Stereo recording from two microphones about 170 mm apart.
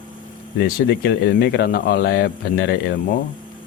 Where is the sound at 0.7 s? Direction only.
70° left (ahead or behind).